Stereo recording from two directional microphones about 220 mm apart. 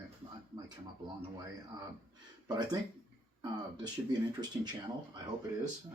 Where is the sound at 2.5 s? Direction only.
20° right (ahead or behind).